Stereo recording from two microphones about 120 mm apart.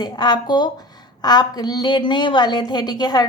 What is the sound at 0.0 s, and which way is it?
A woman's voice, 35° left (ahead or behind).